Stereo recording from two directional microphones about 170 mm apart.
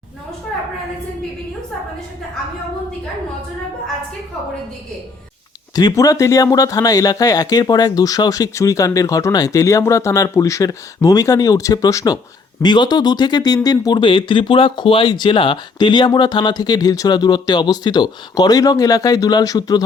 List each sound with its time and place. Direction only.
5.7 s speech: 20° left (ahead or behind)